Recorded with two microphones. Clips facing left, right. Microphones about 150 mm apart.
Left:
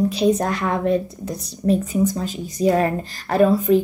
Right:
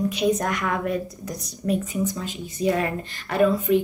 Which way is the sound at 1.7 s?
40° left (ahead or behind).